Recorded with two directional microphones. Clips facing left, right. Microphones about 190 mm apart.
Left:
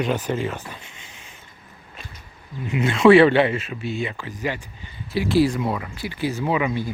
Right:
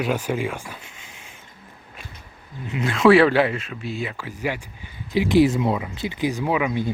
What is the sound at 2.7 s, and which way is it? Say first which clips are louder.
Speech: left 2 dB; 5° left (ahead or behind).